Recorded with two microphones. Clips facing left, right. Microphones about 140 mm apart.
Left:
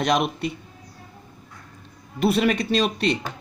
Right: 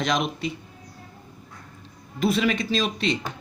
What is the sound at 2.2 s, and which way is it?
Speech, 55° left (ahead or behind).